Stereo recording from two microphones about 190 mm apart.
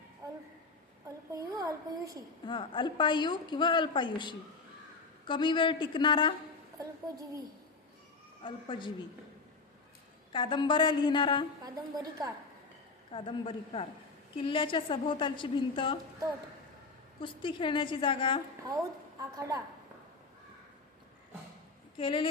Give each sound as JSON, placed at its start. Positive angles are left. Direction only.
{"t": 1.0, "sound": "a woman's voice", "side_deg": -15}
{"t": 2.5, "sound": "a woman's voice", "side_deg": 25}
{"t": 6.7, "sound": "a woman's voice", "side_deg": -20}
{"t": 8.4, "sound": "a woman's voice", "side_deg": 25}
{"t": 10.3, "sound": "a woman's voice", "side_deg": 25}
{"t": 11.6, "sound": "a woman's voice", "side_deg": -20}
{"t": 13.1, "sound": "a woman's voice", "side_deg": 25}
{"t": 17.2, "sound": "a woman's voice", "side_deg": 25}
{"t": 18.7, "sound": "a woman's voice", "side_deg": -15}
{"t": 21.9, "sound": "a woman's voice", "side_deg": 25}